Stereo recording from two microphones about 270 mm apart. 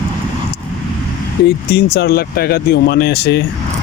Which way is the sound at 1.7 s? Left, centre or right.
Left.